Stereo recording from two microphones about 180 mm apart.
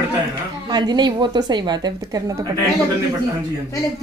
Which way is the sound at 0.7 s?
25° right (ahead or behind).